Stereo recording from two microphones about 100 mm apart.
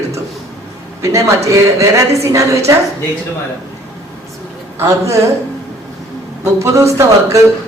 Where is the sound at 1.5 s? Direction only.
30° right (ahead or behind).